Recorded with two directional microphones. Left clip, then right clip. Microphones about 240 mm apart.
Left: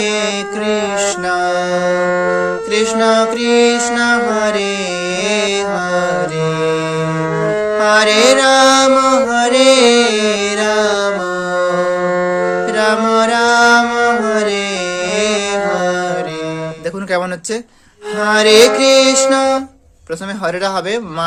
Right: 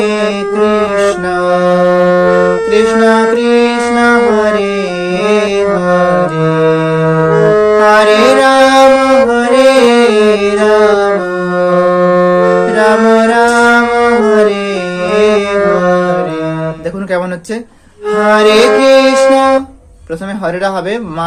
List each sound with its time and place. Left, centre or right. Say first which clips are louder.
0.0 s music: right 4 dB; left
1.3 s music: right 5 dB; left
2.0 s music: right 6 dB; centre
2.6 s music: right 5 dB; left
6.1 s music: right 6 dB; centre
7.8 s music: right 1 dB; left
12.0 s music: right 7 dB; centre
12.7 s music: right 2 dB; left
18.2 s music: right 2 dB; left